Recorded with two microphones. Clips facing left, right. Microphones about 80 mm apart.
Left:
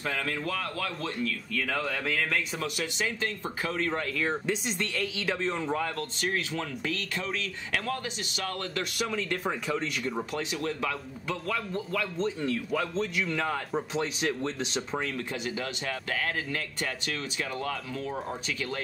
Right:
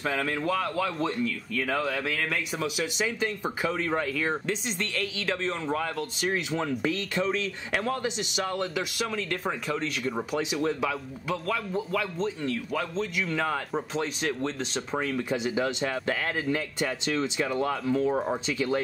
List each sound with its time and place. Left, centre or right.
0.0 s speech: centre
6.3 s speech: centre
8.9 s speech: centre
10.1 s speech: centre
15.1 s speech: centre; by 18.4 s right